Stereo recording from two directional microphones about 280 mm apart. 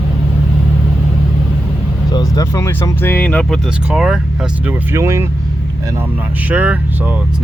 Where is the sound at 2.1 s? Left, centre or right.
Centre.